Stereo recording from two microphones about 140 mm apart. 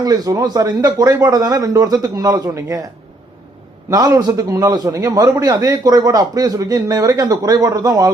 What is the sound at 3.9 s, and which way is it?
Speech, 25° right (ahead or behind).